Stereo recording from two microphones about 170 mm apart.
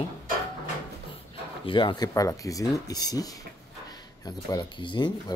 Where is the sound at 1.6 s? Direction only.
30° left (ahead or behind).